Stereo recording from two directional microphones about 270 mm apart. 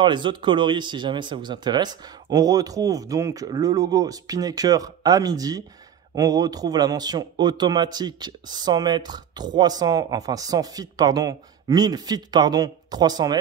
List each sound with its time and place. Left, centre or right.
0.0 s speech: centre